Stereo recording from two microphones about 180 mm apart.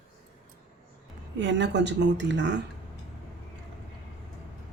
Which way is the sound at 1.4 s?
80° right.